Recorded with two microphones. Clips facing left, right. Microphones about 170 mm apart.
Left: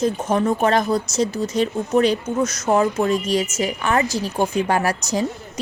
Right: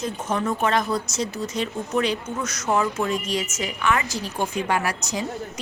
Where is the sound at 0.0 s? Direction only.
35° left (ahead or behind).